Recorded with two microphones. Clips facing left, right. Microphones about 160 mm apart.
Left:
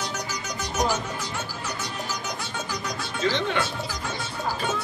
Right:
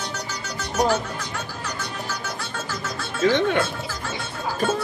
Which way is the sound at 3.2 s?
55° right (ahead or behind).